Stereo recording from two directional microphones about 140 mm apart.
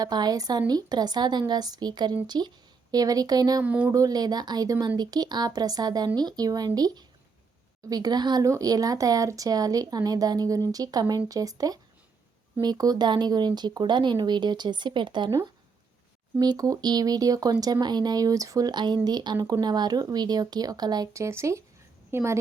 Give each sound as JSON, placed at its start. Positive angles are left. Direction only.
{"t": 0.0, "sound": "speech", "side_deg": -30}
{"t": 3.6, "sound": "speech", "side_deg": -10}
{"t": 3.9, "sound": "speech", "side_deg": -25}